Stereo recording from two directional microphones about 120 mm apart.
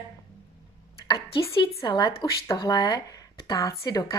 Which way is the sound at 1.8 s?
35° left (ahead or behind).